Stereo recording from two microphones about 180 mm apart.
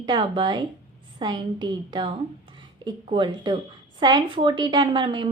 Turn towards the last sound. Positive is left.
turn(degrees=-25)  # may be behind; listen again after turning